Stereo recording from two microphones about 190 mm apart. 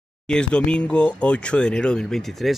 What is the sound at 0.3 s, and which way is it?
Speech, 5° left (ahead or behind).